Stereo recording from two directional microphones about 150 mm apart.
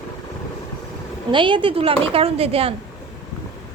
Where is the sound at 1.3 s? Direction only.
35° right (ahead or behind).